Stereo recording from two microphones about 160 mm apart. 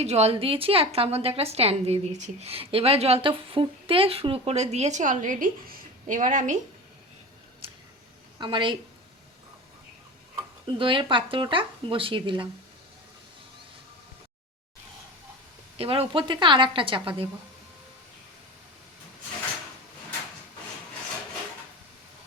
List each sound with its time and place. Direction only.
0.0 s a woman's voice: 40° right (ahead or behind)
8.4 s a woman's voice: 30° right (ahead or behind)
10.8 s a woman's voice: 30° right (ahead or behind)
15.8 s a woman's voice: 35° right (ahead or behind)